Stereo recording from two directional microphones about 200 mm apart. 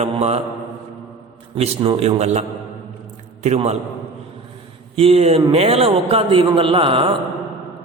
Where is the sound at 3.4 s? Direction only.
35° right (ahead or behind).